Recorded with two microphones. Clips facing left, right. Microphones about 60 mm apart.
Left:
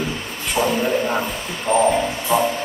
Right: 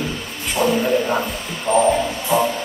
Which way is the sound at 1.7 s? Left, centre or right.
Centre.